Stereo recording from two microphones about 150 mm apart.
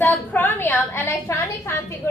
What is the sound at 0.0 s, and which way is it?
A woman's voice, 15° left (ahead or behind).